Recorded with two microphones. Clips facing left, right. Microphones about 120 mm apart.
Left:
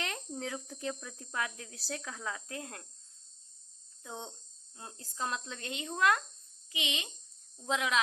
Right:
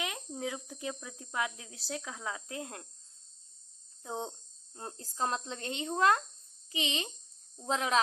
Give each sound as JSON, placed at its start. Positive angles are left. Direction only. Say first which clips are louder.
{"t": 0.0, "sound": "speech", "louder": "right 2 dB", "side_deg": -10}
{"t": 4.0, "sound": "a woman's voice", "louder": "right 6 dB", "side_deg": -30}